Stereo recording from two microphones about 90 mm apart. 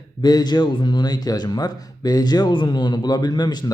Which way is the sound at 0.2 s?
50° left (ahead or behind).